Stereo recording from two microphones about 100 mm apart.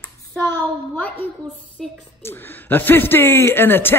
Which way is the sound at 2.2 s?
20° left (ahead or behind).